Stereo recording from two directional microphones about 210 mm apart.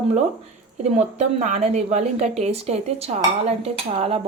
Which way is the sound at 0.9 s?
35° right (ahead or behind).